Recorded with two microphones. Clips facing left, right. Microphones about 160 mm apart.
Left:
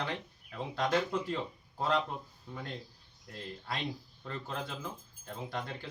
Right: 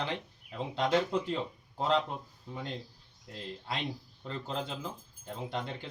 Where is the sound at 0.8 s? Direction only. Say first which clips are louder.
Right 2 dB; 20° right (ahead or behind).